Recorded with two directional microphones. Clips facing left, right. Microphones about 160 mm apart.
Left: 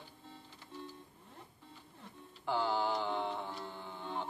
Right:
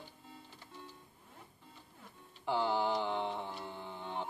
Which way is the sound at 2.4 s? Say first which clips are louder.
Right 1 dB; 20° right (ahead or behind).